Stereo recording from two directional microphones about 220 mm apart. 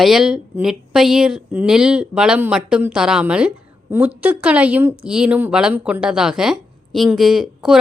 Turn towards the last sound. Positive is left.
turn(degrees=0)  # may be behind; listen again after turning